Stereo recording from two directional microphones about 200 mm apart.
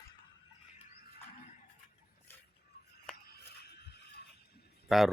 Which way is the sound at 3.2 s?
50° left (ahead or behind).